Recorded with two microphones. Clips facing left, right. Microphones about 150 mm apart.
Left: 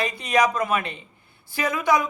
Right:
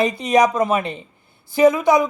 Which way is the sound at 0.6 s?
35° right (ahead or behind).